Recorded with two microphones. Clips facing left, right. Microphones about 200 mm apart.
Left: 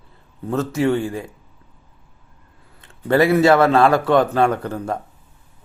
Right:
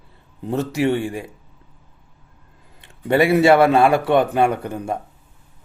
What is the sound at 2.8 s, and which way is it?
A man's voice, 15° right (ahead or behind).